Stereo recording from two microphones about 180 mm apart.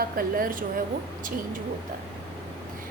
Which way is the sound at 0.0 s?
55° right (ahead or behind).